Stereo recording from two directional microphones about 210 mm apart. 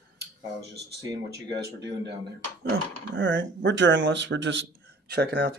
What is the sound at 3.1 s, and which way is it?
Speech, 60° right (ahead or behind).